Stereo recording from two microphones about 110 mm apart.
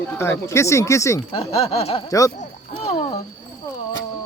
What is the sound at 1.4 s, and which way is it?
Speech, 65° left (ahead or behind).